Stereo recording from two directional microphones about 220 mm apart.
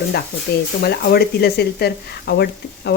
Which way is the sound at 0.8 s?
45° left (ahead or behind).